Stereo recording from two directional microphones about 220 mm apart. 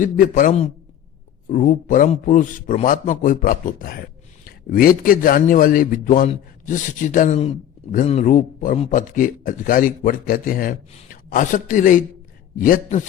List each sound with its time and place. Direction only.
0.0 s a man's voice: 35° left (ahead or behind)